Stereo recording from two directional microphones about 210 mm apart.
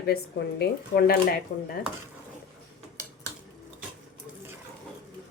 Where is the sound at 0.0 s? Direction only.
50° left (ahead or behind).